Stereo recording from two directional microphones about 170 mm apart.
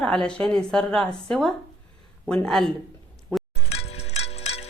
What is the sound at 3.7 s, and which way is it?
Music, 40° left (ahead or behind).